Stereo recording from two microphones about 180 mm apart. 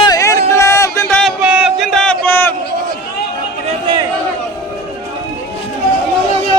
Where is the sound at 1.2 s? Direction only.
5° right (ahead or behind); by 2.5 s 10° left (ahead or behind).